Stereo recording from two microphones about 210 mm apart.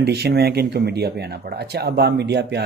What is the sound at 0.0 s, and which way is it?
A woman's voice, 50° right (ahead or behind).